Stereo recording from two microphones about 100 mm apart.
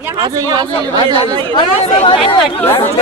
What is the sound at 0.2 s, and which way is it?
Speech, 50° right (ahead or behind).